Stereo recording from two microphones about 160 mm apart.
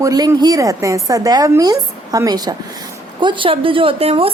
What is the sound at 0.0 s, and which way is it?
A woman's voice, 20° right (ahead or behind).